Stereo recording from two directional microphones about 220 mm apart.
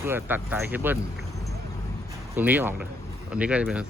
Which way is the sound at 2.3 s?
10° right (ahead or behind).